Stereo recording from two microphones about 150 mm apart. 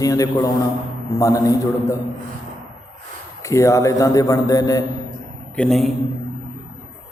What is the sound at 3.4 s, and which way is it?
A man's voice, 20° left (ahead or behind).